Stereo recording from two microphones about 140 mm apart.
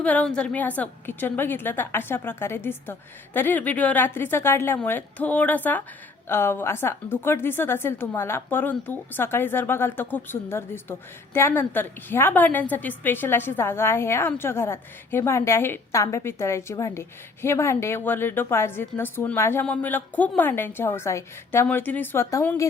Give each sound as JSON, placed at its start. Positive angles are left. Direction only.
{"t": 0.0, "sound": "a woman's voice", "side_deg": 10}